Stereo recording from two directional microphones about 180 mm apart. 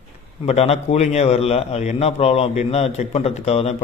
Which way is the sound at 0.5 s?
35° left (ahead or behind).